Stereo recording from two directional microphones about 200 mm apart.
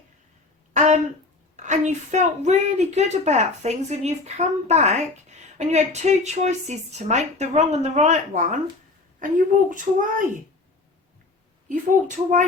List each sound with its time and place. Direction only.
0.7 s a sound: 35° right (ahead or behind)
1.5 s a woman's voice: 35° right (ahead or behind)
11.7 s a woman's voice: 40° right (ahead or behind)